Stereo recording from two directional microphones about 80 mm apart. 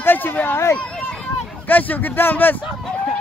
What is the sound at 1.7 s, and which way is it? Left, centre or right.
Speech, left.